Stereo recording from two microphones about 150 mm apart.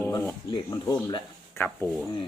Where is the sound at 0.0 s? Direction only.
15° left (ahead or behind).